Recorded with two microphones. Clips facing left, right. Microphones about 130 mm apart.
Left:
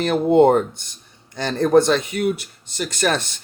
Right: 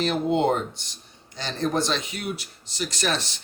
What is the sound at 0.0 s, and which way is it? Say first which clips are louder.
Speech: left 8 dB; 55° left (ahead or behind).